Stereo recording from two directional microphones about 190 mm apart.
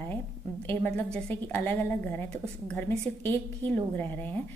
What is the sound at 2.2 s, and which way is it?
Speech, 35° right (ahead or behind).